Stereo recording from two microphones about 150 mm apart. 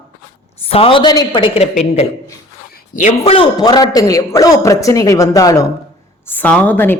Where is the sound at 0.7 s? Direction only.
40° left (ahead or behind).